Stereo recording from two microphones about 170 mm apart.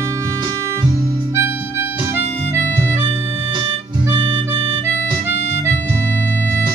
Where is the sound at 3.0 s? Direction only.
30° right (ahead or behind).